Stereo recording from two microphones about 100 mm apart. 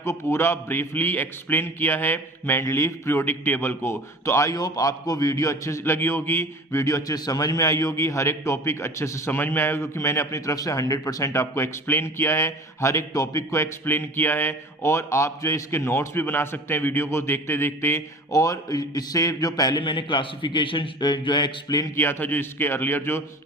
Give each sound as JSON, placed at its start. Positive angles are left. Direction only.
{"t": 0.0, "sound": "a man's voice", "side_deg": 30}
{"t": 19.8, "sound": "a man's voice", "side_deg": 55}
{"t": 21.9, "sound": "a man's voice", "side_deg": 20}